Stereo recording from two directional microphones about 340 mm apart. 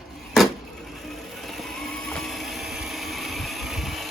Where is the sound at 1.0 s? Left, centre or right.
Centre.